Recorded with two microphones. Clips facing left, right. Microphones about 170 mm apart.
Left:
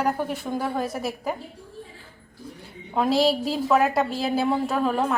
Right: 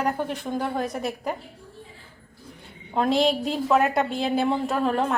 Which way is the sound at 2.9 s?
Centre (ahead or behind).